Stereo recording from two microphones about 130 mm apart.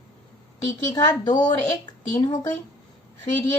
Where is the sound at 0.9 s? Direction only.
35° left (ahead or behind).